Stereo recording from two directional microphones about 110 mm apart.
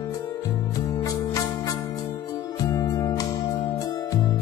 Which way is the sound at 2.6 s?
30° left (ahead or behind).